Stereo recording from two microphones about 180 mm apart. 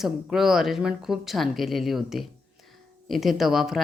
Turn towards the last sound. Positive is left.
turn(degrees=0)  # may be behind; listen again after turning